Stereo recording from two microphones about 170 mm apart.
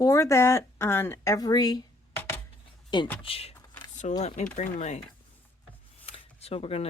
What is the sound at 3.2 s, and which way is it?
Speech, 35° left (ahead or behind).